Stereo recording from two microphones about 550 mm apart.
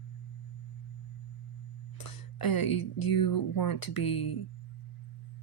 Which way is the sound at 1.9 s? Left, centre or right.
Left.